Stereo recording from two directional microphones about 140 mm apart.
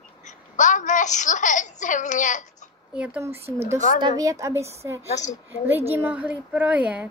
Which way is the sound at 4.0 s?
30° right (ahead or behind).